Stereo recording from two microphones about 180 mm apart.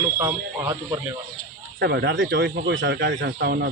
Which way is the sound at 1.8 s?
70° right (ahead or behind).